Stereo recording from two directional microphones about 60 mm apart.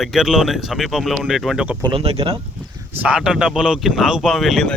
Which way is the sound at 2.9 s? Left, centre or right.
Right.